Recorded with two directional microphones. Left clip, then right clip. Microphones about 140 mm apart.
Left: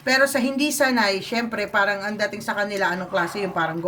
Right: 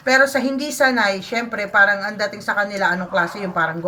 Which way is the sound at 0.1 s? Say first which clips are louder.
Right 4 dB; 20° left (ahead or behind).